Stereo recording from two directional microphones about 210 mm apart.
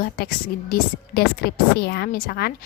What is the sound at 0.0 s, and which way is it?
A woman's voice, 45° left (ahead or behind).